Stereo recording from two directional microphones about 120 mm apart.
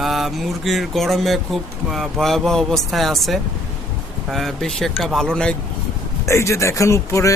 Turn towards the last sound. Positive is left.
turn(degrees=25)  # may be behind; listen again after turning